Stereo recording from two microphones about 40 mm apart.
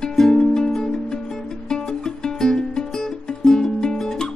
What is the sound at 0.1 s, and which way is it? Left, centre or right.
Music, centre.